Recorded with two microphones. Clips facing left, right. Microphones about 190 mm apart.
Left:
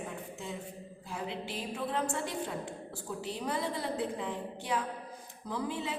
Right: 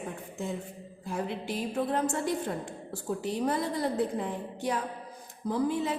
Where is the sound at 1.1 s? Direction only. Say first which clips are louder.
Right 5 dB; 45° right (ahead or behind).